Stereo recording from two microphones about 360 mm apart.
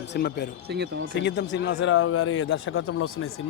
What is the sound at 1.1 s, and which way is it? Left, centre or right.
Speech, left.